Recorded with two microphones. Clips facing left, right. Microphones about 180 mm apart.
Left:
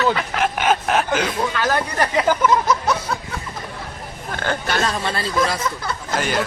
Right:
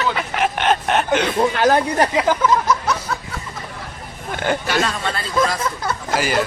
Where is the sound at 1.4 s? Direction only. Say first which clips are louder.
Right 5 dB; 45° right (ahead or behind).